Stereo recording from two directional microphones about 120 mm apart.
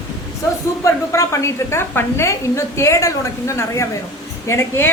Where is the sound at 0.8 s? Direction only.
25° left (ahead or behind).